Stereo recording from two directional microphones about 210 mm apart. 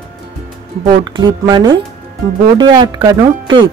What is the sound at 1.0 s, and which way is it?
A woman's voice, 20° right (ahead or behind).